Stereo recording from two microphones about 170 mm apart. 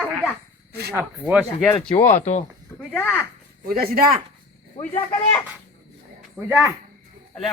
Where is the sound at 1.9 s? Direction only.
40° left (ahead or behind).